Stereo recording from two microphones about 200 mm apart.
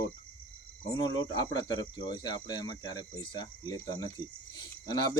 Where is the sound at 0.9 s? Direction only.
20° left (ahead or behind).